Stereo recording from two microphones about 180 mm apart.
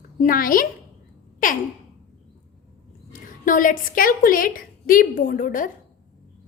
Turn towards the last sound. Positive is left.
turn(degrees=50)  # may be behind; listen again after turning